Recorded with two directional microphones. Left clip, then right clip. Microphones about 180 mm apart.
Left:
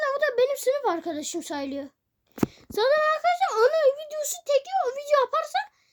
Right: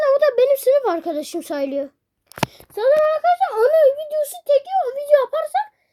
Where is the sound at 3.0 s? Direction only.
5° left (ahead or behind).